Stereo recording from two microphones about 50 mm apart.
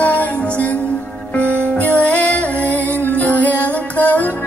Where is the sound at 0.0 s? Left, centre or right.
Left.